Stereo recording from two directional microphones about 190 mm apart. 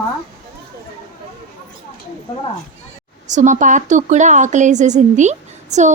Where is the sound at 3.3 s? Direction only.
40° right (ahead or behind).